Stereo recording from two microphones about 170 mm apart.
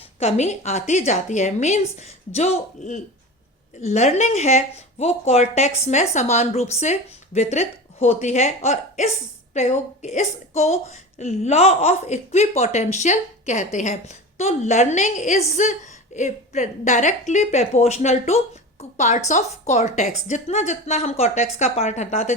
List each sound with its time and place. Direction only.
0.2 s a woman's voice: 40° left (ahead or behind)